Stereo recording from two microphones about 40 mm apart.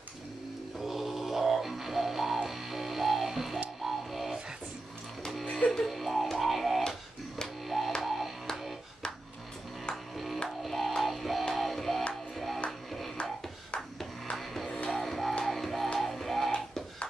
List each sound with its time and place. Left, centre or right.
0.7 s music: centre
3.8 s a sound: centre
5.4 s music: left
5.9 s music: centre
10.1 s music: centre
14.3 s music: centre